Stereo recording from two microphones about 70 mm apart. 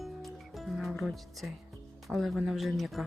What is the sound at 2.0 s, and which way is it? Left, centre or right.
Speech, centre.